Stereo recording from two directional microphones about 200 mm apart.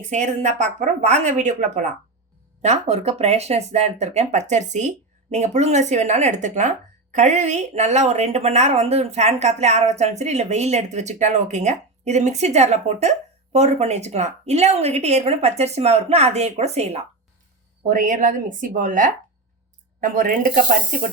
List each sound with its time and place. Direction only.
0.1 s speech: 35° right (ahead or behind)